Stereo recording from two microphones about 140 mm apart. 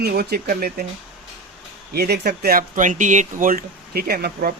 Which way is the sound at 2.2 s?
90° right.